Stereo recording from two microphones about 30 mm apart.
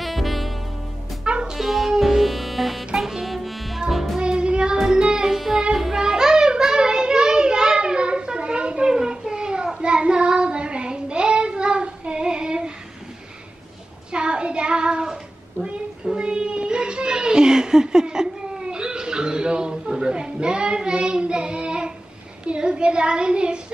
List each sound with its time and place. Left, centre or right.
0.0 s saxophone: centre
1.2 s music: right
1.6 s music: centre
1.9 s saxophone: centre
3.3 s music: centre
4.2 s music: right
4.7 s music: centre
5.3 s music: centre
5.9 s a sound: centre; by 8.8 s right
8.8 s a sound: right
9.8 s child singing: right
14.1 s child singing: right
22.4 s a sound: right